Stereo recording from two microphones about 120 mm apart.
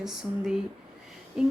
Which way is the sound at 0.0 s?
5° right (ahead or behind).